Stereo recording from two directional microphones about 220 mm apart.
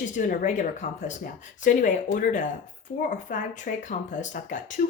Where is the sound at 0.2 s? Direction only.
35° left (ahead or behind).